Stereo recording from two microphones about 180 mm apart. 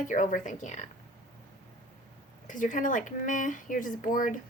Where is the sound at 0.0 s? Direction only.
45° left (ahead or behind).